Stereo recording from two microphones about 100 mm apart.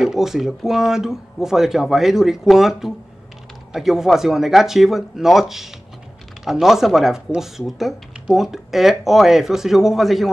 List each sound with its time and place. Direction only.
0.0 s speech: 5° right (ahead or behind)